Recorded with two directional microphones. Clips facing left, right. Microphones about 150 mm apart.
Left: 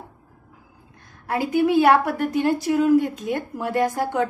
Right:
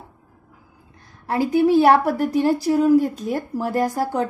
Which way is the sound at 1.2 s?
35° right (ahead or behind).